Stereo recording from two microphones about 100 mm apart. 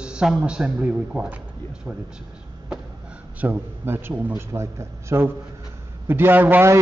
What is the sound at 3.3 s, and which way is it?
A man's voice, 20° right (ahead or behind).